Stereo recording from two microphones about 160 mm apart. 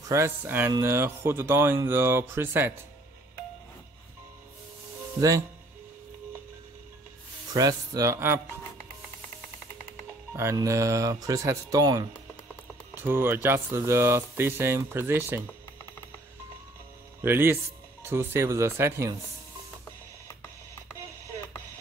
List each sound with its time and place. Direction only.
0.1 s speech: 15° right (ahead or behind)
7.5 s speech: 20° right (ahead or behind)
10.3 s speech: 20° right (ahead or behind)
12.9 s speech: 15° right (ahead or behind)
17.2 s speech: 15° right (ahead or behind)